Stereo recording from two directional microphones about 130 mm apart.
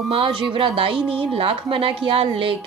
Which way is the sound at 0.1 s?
40° right (ahead or behind).